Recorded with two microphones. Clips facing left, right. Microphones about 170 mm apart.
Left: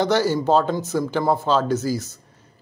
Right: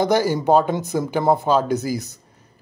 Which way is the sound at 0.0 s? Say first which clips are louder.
Right 1 dB; 10° right (ahead or behind).